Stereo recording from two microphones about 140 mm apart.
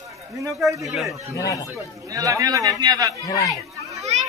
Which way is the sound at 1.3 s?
20° left (ahead or behind).